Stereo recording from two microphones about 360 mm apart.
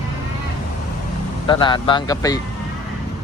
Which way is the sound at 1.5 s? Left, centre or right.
Centre.